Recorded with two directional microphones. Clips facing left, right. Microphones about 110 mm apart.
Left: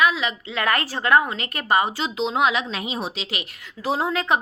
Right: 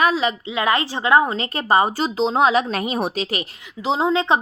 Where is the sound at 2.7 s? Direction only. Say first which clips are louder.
Right 6 dB; 50° right (ahead or behind).